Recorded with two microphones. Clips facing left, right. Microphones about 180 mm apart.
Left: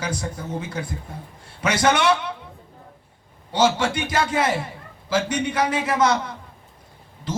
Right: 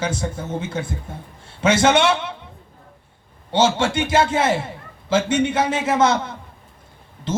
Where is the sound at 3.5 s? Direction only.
25° right (ahead or behind).